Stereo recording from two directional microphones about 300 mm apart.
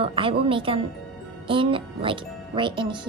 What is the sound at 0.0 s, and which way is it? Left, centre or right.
A woman's voice, centre.